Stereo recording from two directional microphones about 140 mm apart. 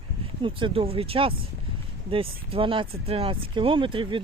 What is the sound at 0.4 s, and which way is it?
Speech, 40° right (ahead or behind).